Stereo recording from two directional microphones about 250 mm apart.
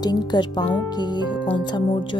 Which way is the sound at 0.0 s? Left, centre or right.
Centre.